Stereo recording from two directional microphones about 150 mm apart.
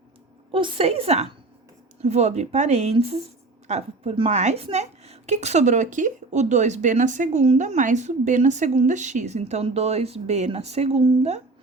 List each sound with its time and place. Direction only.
0.5 s a woman's voice: 40° right (ahead or behind)